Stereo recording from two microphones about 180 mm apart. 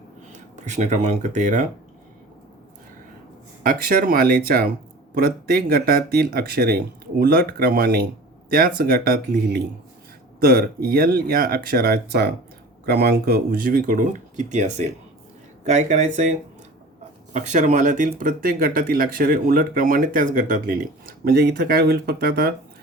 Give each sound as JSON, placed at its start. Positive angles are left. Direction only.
{"t": 0.3, "sound": "speech", "side_deg": -40}
{"t": 3.6, "sound": "speech", "side_deg": -55}
{"t": 17.3, "sound": "speech", "side_deg": -40}
{"t": 21.2, "sound": "speech", "side_deg": -60}